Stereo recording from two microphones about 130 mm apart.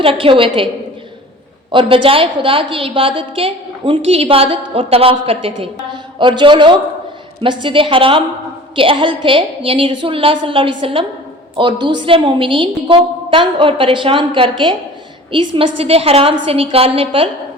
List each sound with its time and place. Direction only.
0.0 s a woman's voice: 40° right (ahead or behind)
1.7 s a woman's voice: 40° right (ahead or behind)